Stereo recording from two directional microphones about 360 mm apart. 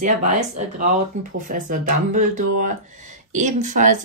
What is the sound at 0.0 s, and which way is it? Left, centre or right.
Speech, right.